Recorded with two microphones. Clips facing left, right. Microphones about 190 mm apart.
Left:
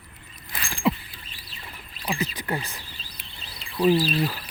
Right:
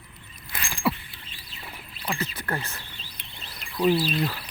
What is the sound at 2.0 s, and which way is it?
Speech, 15° left (ahead or behind).